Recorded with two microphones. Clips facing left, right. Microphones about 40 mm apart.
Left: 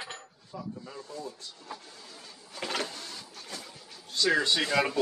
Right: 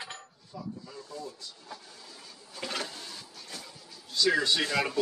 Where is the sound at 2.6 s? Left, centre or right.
Left.